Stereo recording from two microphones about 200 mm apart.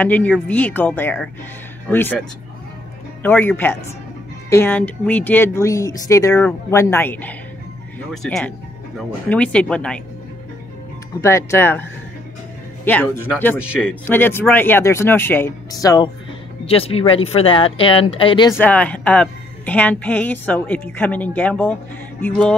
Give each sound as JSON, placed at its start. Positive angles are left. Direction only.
{"t": 0.0, "sound": "a woman's voice", "side_deg": 10}
{"t": 11.1, "sound": "a woman's voice", "side_deg": 15}
{"t": 12.8, "sound": "a woman's voice", "side_deg": 10}
{"t": 16.6, "sound": "speech", "side_deg": 30}
{"t": 18.5, "sound": "a woman's voice", "side_deg": 10}